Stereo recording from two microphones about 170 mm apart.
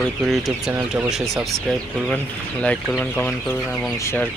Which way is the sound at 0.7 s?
15° right (ahead or behind).